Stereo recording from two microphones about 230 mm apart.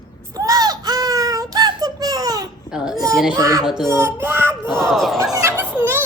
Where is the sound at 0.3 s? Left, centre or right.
Centre.